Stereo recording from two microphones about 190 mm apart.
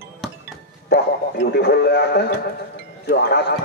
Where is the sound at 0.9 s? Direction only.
55° left (ahead or behind).